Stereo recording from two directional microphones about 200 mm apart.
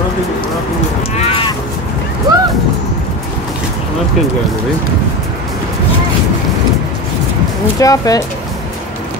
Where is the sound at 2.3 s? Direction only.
20° right (ahead or behind).